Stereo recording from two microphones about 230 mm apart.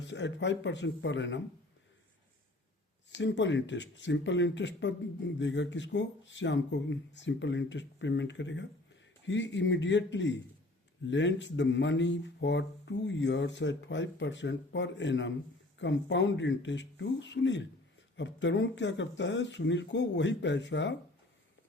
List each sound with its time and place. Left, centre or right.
0.0 s speech: left
3.1 s speech: left